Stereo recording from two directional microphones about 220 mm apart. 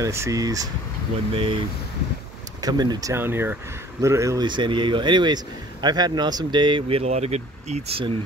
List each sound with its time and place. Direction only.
0.0 s a man's voice: 15° right (ahead or behind)
2.6 s a man's voice: 15° right (ahead or behind)